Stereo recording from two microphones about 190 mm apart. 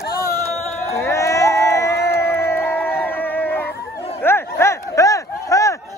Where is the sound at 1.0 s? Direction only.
15° left (ahead or behind).